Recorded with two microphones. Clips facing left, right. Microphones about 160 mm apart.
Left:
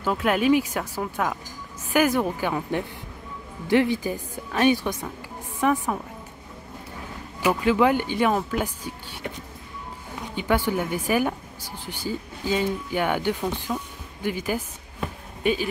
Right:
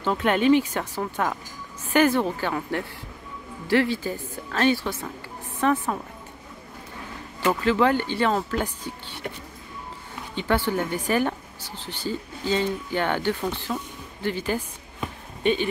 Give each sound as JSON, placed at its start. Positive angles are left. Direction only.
{"t": 0.0, "sound": "speech", "side_deg": 5}
{"t": 7.3, "sound": "speech", "side_deg": 15}
{"t": 10.3, "sound": "speech", "side_deg": 10}
{"t": 15.0, "sound": "a sound", "side_deg": 5}